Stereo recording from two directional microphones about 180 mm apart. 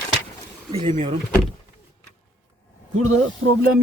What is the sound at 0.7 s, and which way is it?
Speech, 30° right (ahead or behind).